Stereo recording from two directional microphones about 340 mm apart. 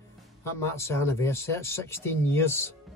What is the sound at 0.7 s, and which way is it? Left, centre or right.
Speech, centre.